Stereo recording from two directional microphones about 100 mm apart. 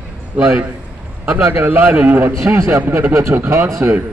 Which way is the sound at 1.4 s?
25° right (ahead or behind).